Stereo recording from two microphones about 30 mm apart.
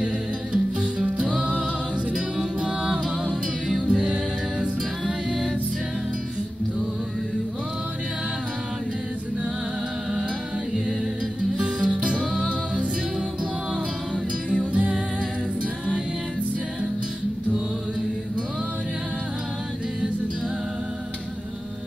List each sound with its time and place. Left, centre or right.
0.0 s music: right
1.0 s music: right
3.8 s music: right
11.5 s music: right
12.4 s music: right
14.5 s music: right